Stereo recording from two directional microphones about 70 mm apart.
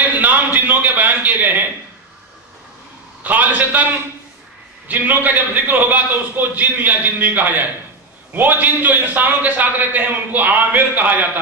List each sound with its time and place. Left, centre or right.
0.2 s a sound: right
3.3 s a man's voice: right
4.8 s a man's voice: right